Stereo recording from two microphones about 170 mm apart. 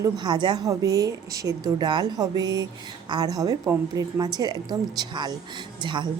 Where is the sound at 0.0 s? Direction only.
25° right (ahead or behind).